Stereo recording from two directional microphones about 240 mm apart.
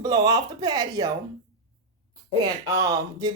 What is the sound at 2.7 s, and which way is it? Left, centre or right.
Speech, centre.